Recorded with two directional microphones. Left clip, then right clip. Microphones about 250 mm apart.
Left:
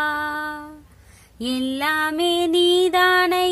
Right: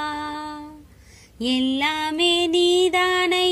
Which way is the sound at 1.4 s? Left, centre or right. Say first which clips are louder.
Right 3 dB; left.